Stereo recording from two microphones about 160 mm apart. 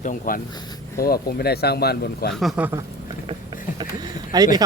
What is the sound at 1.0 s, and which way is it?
Speech, 70° left (ahead or behind).